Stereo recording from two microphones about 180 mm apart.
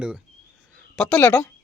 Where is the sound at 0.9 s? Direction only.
5° left (ahead or behind).